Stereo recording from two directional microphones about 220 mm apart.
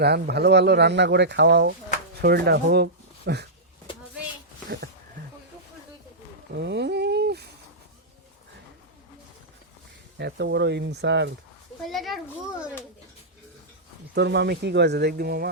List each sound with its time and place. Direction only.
0.0 s speech: 45° right (ahead or behind)
6.6 s a sound: 50° right (ahead or behind)
10.2 s speech: 50° right (ahead or behind)
11.8 s a child's voice: centre (ahead or behind)
14.2 s speech: 50° right (ahead or behind)